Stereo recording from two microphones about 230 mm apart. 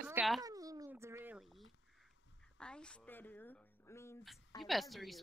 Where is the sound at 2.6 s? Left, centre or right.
Centre.